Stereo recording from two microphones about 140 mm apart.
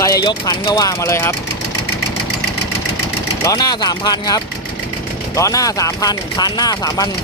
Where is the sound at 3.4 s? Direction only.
25° left (ahead or behind).